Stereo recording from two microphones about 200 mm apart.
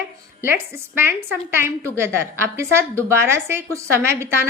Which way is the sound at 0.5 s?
10° right (ahead or behind).